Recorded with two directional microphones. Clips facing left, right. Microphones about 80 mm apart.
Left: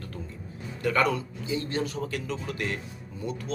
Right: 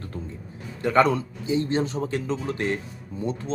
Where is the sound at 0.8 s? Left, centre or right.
Right.